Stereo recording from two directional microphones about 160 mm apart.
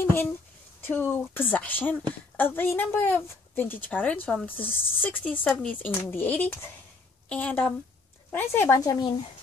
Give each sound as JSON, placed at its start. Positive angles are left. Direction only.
{"t": 0.0, "sound": "a woman's voice", "side_deg": 15}